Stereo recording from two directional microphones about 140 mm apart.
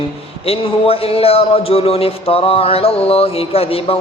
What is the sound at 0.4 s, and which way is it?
A man's voice, 45° left (ahead or behind).